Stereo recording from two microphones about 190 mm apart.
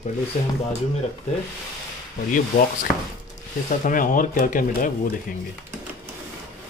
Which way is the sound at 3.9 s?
45° left (ahead or behind).